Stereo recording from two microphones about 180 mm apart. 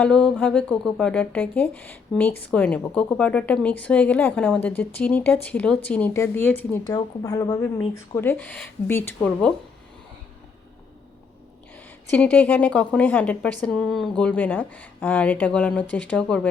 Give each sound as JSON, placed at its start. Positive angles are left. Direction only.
{"t": 0.0, "sound": "speech", "side_deg": 5}
{"t": 6.8, "sound": "speech", "side_deg": 20}
{"t": 12.1, "sound": "speech", "side_deg": 5}